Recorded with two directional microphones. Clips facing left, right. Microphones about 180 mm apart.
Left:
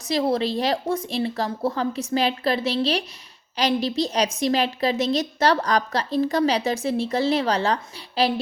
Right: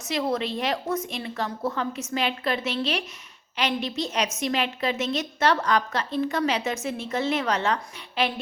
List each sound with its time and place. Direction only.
0.1 s a woman's voice: 35° left (ahead or behind)